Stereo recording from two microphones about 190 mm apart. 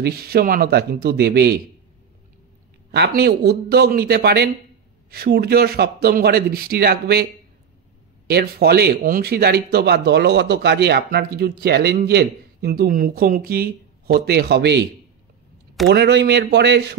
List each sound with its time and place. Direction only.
0.0 s a man's voice: 55° right (ahead or behind)
2.9 s a man's voice: 60° right (ahead or behind)
8.3 s a man's voice: 55° right (ahead or behind)
15.9 s a man's voice: 65° right (ahead or behind)